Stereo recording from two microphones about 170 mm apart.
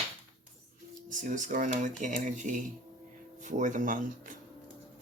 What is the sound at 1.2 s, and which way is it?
Speech, 50° right (ahead or behind).